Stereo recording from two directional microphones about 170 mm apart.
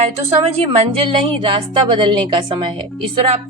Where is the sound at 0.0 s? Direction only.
35° right (ahead or behind).